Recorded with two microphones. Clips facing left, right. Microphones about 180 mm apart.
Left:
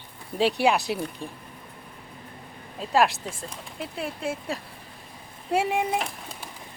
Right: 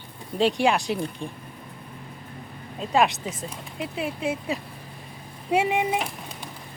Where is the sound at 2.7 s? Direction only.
Centre (ahead or behind).